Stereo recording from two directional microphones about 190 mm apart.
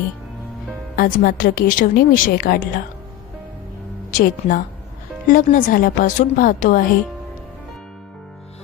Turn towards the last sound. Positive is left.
turn(degrees=45)  # may be behind; listen again after turning